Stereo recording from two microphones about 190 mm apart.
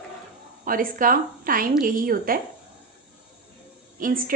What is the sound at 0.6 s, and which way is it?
A woman's voice, 45° right (ahead or behind).